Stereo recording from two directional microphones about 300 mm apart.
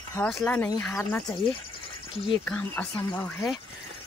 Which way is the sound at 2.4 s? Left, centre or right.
Centre.